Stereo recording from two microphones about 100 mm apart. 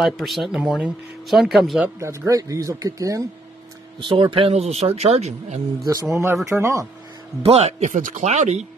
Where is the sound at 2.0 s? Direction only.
30° right (ahead or behind).